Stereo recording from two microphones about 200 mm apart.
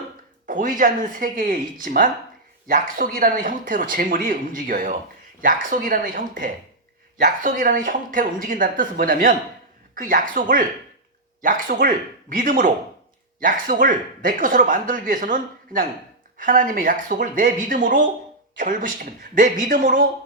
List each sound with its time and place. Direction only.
0.4 s speech: 45° right (ahead or behind)